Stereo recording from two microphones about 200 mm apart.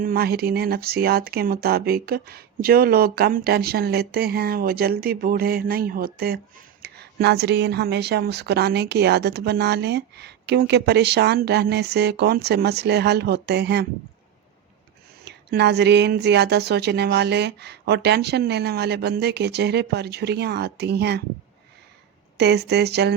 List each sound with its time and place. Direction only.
0.0 s speech: 50° right (ahead or behind)
15.2 s speech: 55° right (ahead or behind)
22.4 s speech: 55° right (ahead or behind)